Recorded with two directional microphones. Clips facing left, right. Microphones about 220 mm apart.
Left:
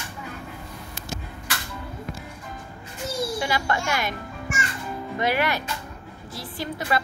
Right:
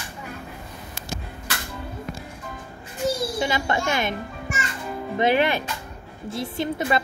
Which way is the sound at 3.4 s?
20° right (ahead or behind).